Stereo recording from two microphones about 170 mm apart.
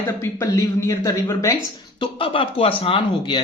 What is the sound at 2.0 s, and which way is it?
Speech, 30° left (ahead or behind).